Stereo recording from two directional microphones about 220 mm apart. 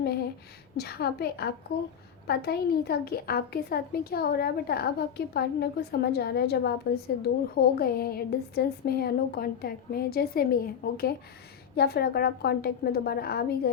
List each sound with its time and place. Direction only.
0.8 s a woman's voice: 45° left (ahead or behind)